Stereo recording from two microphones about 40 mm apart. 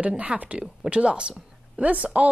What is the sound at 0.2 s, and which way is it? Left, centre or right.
Speech, right.